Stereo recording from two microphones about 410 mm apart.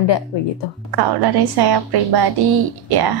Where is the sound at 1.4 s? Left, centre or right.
Right.